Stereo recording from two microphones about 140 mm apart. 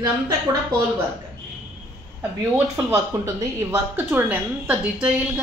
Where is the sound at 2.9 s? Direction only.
20° right (ahead or behind).